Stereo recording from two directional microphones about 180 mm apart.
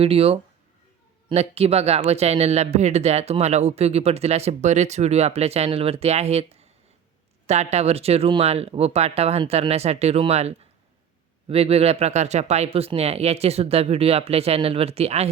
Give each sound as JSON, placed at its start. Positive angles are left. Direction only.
{"t": 0.0, "sound": "speech", "side_deg": -35}